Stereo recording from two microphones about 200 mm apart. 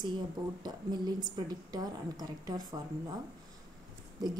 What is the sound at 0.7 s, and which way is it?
A woman's voice, 20° right (ahead or behind).